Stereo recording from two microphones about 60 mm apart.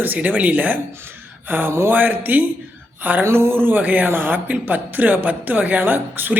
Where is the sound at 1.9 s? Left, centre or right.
Right.